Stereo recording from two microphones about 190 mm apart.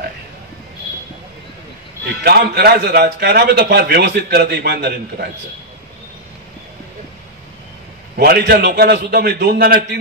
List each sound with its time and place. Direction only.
2.2 s a man's voice: 55° right (ahead or behind)
8.2 s a man's voice: 55° right (ahead or behind)